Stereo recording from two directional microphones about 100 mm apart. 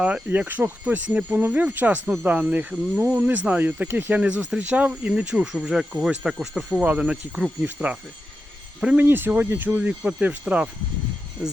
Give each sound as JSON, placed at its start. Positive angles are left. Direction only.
{"t": 0.0, "sound": "speech", "side_deg": -15}